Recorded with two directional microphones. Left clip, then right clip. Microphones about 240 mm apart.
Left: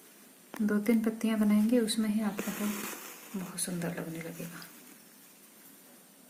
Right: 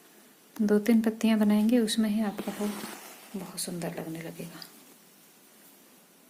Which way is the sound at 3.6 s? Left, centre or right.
Right.